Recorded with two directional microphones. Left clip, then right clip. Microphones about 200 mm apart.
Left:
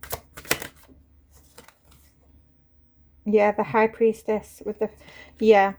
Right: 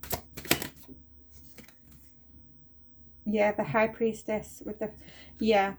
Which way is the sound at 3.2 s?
55° left (ahead or behind).